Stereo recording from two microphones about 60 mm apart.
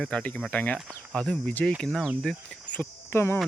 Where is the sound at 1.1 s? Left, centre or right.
Centre.